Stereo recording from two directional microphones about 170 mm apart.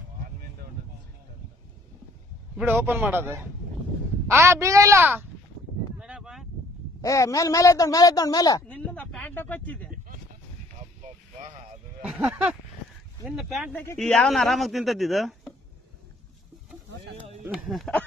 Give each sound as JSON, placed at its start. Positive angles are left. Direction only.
{"t": 2.5, "sound": "a man's voice", "side_deg": -10}
{"t": 5.9, "sound": "a sound", "side_deg": -5}
{"t": 7.0, "sound": "speech", "side_deg": 20}
{"t": 8.6, "sound": "a sound", "side_deg": 5}
{"t": 12.0, "sound": "a man's voice", "side_deg": -5}
{"t": 17.5, "sound": "a man's voice", "side_deg": -5}